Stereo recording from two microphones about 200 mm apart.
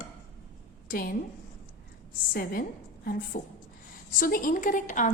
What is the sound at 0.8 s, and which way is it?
Speech, 45° left (ahead or behind).